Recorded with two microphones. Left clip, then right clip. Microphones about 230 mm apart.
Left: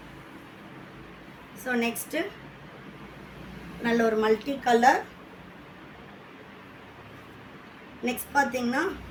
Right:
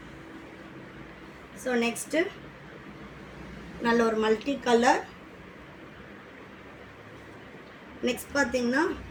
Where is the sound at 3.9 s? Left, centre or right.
Left.